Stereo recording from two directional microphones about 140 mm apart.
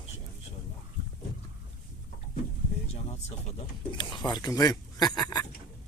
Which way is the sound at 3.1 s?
50° left (ahead or behind).